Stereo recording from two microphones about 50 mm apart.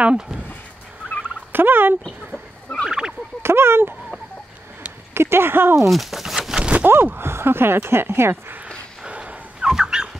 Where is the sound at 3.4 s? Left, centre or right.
Right.